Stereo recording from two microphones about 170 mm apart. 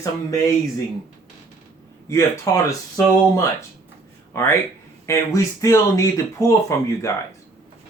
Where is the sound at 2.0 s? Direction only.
15° left (ahead or behind).